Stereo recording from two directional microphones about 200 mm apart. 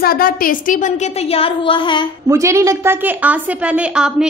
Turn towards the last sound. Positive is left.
turn(degrees=-5)  # may be behind; listen again after turning